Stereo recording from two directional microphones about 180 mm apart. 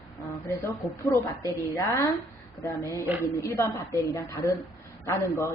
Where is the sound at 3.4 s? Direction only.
15° left (ahead or behind).